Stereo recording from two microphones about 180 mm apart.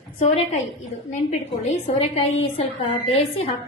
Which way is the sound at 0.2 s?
35° left (ahead or behind).